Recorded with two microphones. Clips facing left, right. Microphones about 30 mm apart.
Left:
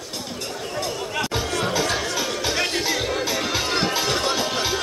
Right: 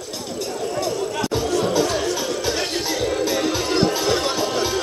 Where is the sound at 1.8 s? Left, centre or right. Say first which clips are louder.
Right 3 dB; left.